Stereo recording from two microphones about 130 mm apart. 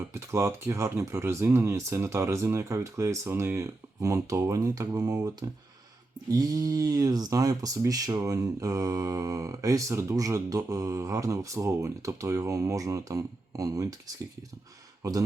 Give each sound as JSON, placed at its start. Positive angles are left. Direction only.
{"t": 0.1, "sound": "speech", "side_deg": -20}
{"t": 15.0, "sound": "speech", "side_deg": -30}